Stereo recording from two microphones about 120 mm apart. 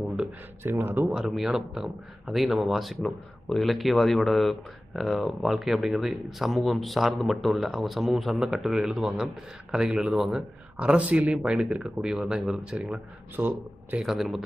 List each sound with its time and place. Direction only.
0.7 s speech: 20° right (ahead or behind)
1.1 s speech: centre (ahead or behind)
14.0 s speech: centre (ahead or behind)